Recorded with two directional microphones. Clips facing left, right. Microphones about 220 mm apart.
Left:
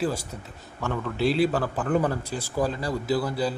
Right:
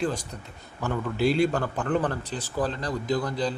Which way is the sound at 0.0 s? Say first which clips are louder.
Left 1 dB; 5° left (ahead or behind).